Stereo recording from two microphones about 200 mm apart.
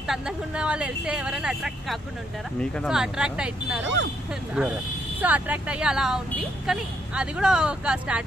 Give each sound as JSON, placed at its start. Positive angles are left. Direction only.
{"t": 0.0, "sound": "speech", "side_deg": -5}
{"t": 3.8, "sound": "speech", "side_deg": -65}
{"t": 4.6, "sound": "speech", "side_deg": -5}